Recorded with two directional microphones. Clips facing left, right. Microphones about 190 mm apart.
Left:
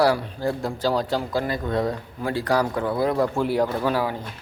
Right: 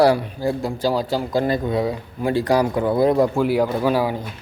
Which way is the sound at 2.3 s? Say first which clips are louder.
Right 4 dB; 15° right (ahead or behind).